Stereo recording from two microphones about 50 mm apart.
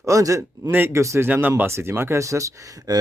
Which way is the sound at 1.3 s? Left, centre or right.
Right.